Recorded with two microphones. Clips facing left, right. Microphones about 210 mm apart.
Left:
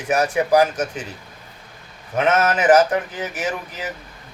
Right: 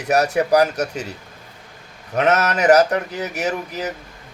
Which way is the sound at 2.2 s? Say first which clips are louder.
Right 1 dB; 40° right (ahead or behind).